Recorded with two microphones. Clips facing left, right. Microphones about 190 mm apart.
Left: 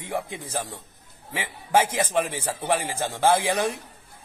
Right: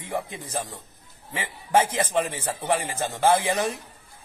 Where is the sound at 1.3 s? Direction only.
10° left (ahead or behind).